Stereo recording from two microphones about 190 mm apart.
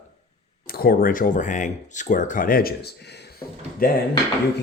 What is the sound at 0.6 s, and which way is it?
Speech, 50° left (ahead or behind).